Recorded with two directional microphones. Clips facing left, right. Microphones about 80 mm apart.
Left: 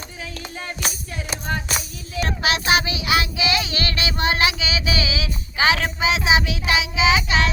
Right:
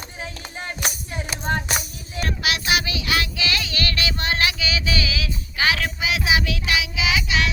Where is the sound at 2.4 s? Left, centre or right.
Left.